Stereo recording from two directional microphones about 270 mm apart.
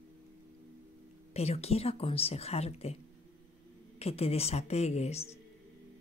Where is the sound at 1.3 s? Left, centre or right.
Left.